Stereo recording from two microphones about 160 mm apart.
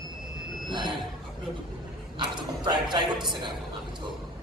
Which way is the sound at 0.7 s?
30° right (ahead or behind).